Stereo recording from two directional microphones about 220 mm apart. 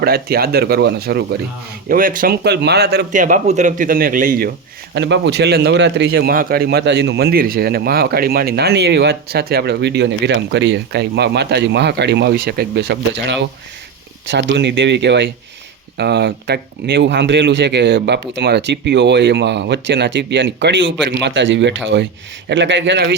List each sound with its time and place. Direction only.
0.0 s a man's voice: 45° right (ahead or behind)
4.9 s a man's voice: 55° right (ahead or behind)